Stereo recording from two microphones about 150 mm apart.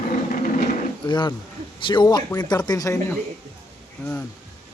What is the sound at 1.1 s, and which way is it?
Speech, 30° left (ahead or behind).